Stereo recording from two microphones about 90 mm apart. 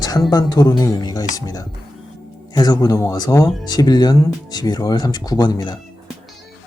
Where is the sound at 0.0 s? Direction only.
45° left (ahead or behind).